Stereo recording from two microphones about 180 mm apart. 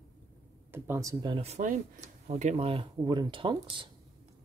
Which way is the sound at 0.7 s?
10° right (ahead or behind).